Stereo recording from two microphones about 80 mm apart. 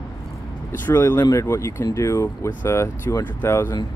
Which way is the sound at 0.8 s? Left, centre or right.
Left.